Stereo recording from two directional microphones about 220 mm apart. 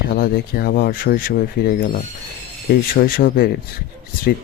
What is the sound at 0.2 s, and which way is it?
Speech, 45° left (ahead or behind).